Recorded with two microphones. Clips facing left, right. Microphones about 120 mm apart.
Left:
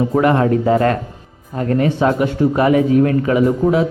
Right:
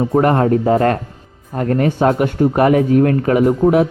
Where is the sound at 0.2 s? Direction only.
40° right (ahead or behind).